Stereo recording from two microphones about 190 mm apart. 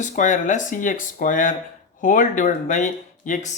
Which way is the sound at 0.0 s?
40° left (ahead or behind).